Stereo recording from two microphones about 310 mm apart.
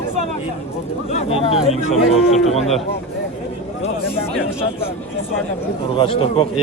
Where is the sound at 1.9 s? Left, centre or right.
Centre.